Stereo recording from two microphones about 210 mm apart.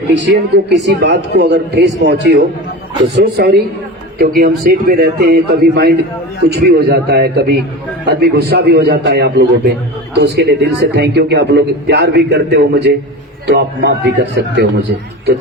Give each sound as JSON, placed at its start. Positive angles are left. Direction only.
{"t": 0.1, "sound": "a man's voice", "side_deg": -55}
{"t": 3.2, "sound": "a man's voice", "side_deg": -50}